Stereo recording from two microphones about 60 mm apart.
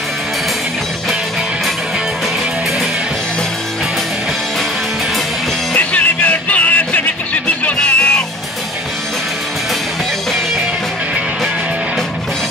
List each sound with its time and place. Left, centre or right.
5.8 s music: left